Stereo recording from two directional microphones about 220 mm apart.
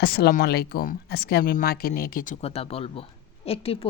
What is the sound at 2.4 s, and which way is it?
Speech, 25° left (ahead or behind).